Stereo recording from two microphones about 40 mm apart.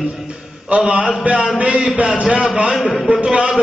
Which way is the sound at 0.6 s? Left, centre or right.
Right.